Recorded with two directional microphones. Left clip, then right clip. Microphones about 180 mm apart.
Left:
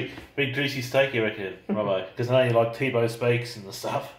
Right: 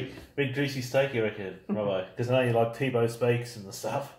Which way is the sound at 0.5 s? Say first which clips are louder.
Left 4 dB; 15° right (ahead or behind).